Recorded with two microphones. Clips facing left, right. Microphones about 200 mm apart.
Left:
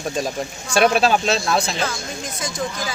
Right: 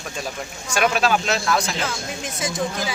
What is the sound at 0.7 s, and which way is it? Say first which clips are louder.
Speech: left 4 dB; 30° left (ahead or behind).